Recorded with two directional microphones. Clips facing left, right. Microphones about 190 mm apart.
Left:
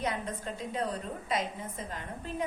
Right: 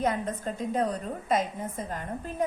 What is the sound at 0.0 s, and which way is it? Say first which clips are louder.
A woman's voice: right 6 dB; 45° right (ahead or behind).